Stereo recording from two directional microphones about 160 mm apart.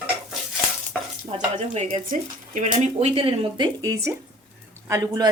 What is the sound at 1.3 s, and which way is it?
A woman's voice, 35° right (ahead or behind).